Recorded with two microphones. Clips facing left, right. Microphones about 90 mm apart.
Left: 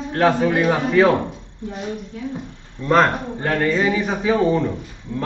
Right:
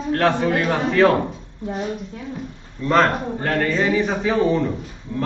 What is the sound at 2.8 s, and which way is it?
A man's voice, 5° left (ahead or behind).